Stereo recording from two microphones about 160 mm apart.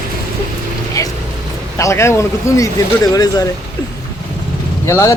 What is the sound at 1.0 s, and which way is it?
Vehicle, 20° left (ahead or behind).